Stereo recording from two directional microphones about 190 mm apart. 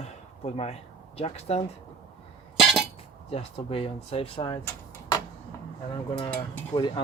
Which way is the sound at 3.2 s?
30° left (ahead or behind).